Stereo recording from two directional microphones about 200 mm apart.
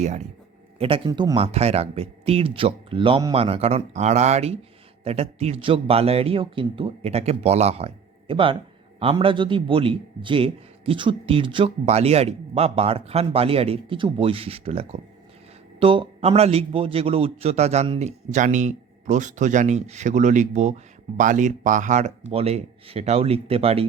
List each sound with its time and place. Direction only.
0.8 s a man's voice: 25° right (ahead or behind)